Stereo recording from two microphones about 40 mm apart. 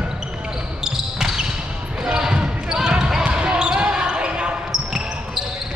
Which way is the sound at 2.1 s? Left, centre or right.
Centre.